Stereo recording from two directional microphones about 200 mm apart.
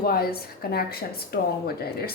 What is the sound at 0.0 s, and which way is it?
A woman's voice, 50° left (ahead or behind).